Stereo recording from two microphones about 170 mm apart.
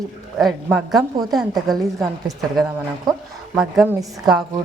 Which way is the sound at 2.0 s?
20° right (ahead or behind).